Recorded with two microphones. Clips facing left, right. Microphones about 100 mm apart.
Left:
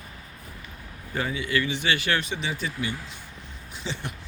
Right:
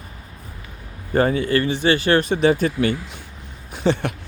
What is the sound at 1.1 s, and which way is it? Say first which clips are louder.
Speech: right 10 dB; 45° right (ahead or behind).